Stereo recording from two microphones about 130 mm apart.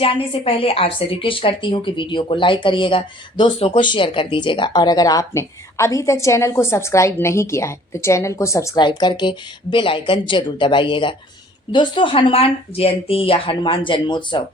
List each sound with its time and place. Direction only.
0.0 s speech: 45° left (ahead or behind); by 8.8 s 25° left (ahead or behind)
8.8 s speech: 35° left (ahead or behind)